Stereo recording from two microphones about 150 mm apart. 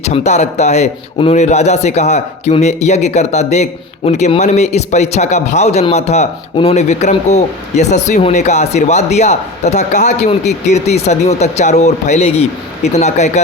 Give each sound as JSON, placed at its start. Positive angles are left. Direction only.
{"t": 0.1, "sound": "a man's voice", "side_deg": 45}